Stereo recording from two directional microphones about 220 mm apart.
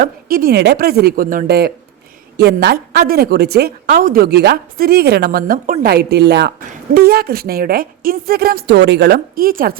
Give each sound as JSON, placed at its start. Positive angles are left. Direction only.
{"t": 0.0, "sound": "a woman's voice", "side_deg": -40}